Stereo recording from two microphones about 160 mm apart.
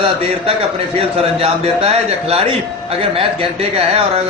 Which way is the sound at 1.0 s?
40° right (ahead or behind).